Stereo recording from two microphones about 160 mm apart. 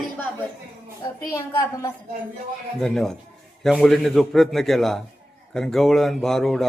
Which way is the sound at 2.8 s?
Centre (ahead or behind).